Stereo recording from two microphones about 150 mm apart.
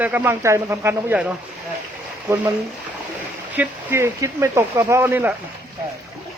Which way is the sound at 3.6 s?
15° right (ahead or behind).